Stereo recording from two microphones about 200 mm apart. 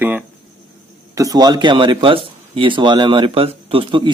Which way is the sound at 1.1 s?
15° right (ahead or behind).